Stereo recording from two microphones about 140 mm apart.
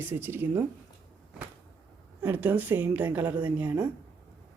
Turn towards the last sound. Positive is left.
turn(degrees=-10)  # may be behind; listen again after turning